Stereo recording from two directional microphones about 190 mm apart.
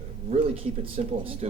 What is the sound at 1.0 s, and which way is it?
Speech, 35° right (ahead or behind).